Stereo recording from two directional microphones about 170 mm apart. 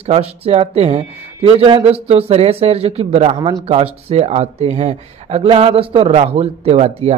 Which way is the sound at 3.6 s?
35° right (ahead or behind).